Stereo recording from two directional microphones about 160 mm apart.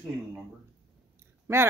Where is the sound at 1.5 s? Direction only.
15° right (ahead or behind).